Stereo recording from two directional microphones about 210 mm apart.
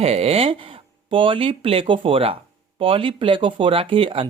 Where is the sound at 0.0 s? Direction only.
30° right (ahead or behind).